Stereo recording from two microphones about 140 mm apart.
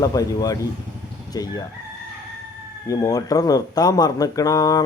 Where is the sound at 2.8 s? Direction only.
25° left (ahead or behind).